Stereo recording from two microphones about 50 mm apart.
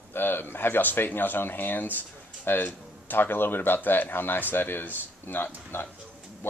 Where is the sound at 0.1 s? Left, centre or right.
Left.